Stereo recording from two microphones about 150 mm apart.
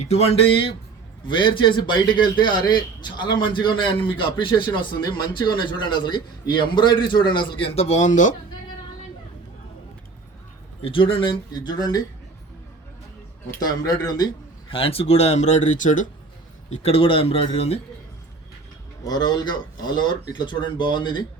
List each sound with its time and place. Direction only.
0.0 s a man's voice: 45° left (ahead or behind)
10.8 s a man's voice: 35° left (ahead or behind)
13.6 s a man's voice: 25° left (ahead or behind)
14.7 s speech: 40° left (ahead or behind); by 16.0 s 55° left (ahead or behind)
16.6 s a man's voice: 45° left (ahead or behind)
19.0 s a man's voice: 25° left (ahead or behind)